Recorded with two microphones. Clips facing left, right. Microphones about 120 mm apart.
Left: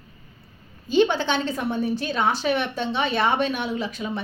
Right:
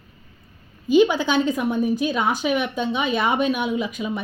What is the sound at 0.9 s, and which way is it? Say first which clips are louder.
A woman's voice: right 3 dB; 10° right (ahead or behind).